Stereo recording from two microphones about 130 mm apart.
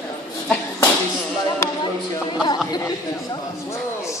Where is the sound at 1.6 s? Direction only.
20° left (ahead or behind).